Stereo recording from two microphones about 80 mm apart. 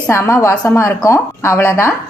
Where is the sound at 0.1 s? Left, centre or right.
Left.